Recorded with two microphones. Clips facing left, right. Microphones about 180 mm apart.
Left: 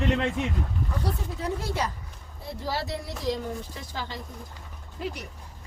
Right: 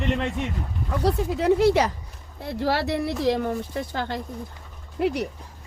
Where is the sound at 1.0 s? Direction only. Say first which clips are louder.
Right 14 dB; 80° right.